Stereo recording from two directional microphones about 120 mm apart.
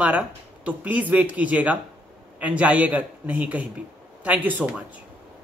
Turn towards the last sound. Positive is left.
turn(degrees=-15)  # may be behind; listen again after turning